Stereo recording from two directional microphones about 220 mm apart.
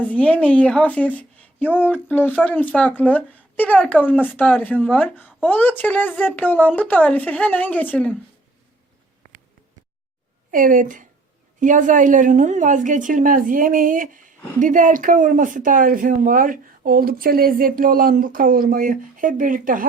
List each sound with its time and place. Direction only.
0.0 s speech: 5° left (ahead or behind)
10.5 s a woman's voice: 40° right (ahead or behind)